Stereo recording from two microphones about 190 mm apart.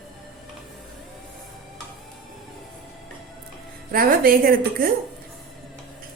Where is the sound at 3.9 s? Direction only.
50° right (ahead or behind).